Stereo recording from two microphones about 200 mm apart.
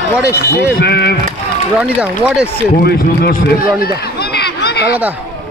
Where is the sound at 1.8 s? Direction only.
5° right (ahead or behind).